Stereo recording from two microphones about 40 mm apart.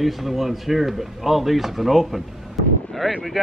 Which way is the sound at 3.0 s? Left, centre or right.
Centre.